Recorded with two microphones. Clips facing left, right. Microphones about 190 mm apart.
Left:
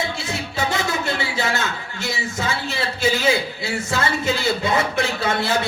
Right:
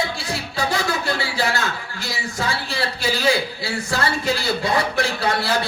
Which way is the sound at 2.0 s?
20° left (ahead or behind).